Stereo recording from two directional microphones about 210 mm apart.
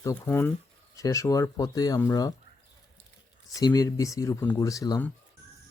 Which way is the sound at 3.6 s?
15° left (ahead or behind).